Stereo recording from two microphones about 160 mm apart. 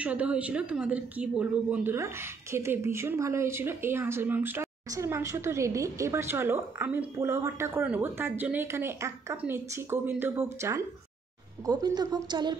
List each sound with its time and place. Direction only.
0.0 s a woman's voice: 10° right (ahead or behind); by 12.5 s 25° right (ahead or behind)